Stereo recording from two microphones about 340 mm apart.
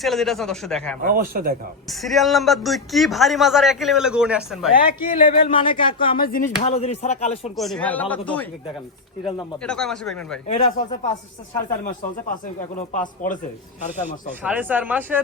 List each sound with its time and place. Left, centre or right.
0.0 s a man's voice: centre
1.0 s speech: right
1.9 s a man's voice: centre
4.9 s speech: left
6.1 s speech: left
7.5 s a man's voice: centre
9.6 s a man's voice: centre
10.5 s speech: centre
13.0 s speech: left
14.4 s a man's voice: centre